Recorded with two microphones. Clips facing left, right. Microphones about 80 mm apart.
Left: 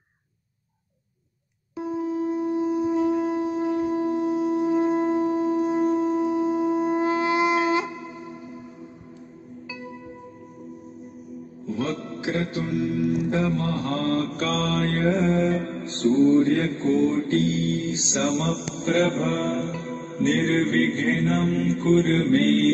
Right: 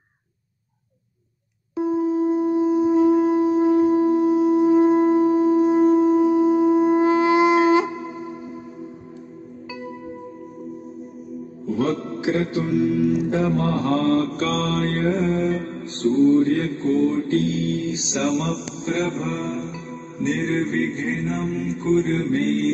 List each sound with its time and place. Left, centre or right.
1.8 s a sound: right
11.7 s music: centre
15.0 s music: left
16.2 s mantra: left
19.8 s music: left
20.2 s music: left